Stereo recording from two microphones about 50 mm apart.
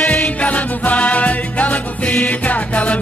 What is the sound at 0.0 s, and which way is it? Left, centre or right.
Music, left.